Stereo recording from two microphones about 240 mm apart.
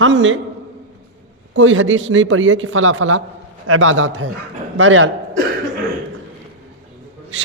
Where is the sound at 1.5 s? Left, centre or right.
Right.